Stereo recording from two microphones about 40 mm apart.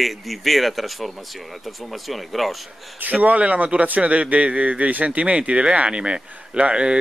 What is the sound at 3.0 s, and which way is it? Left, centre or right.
A man's voice, right.